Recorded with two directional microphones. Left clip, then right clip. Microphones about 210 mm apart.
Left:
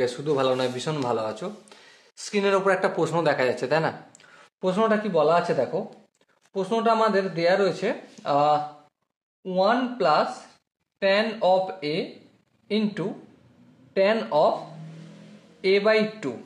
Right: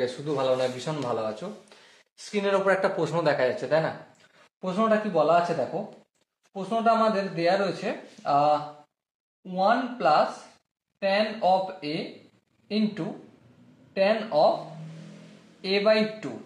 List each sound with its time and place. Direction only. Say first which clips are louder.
0.0 s speech: left 3 dB; 45° left (ahead or behind)
6.5 s speech: left 1 dB; 50° left (ahead or behind)
15.6 s speech: left 2 dB; 45° left (ahead or behind)